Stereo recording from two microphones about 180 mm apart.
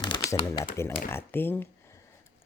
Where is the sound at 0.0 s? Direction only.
20° left (ahead or behind).